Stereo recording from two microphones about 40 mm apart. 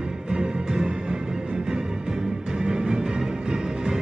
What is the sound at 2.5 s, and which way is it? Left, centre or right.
Music, right.